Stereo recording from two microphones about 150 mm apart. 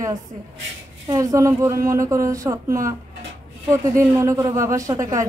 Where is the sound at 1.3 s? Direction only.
20° right (ahead or behind).